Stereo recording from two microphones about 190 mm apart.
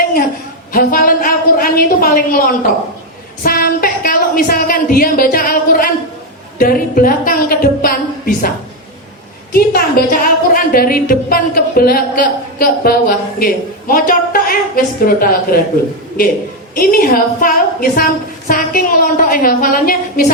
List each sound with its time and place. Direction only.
0.7 s a woman's voice: 50° left (ahead or behind)
3.4 s a sound: 50° left (ahead or behind)
6.6 s a woman's voice: 50° left (ahead or behind)
9.5 s a woman's voice: 50° left (ahead or behind)
16.7 s a woman's voice: 45° left (ahead or behind)